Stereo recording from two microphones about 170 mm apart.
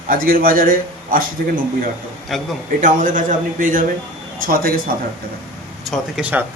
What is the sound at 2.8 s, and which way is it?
A man's voice, 50° right (ahead or behind).